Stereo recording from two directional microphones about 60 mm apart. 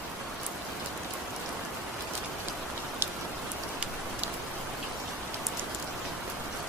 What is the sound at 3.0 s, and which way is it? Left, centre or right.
Rain, right.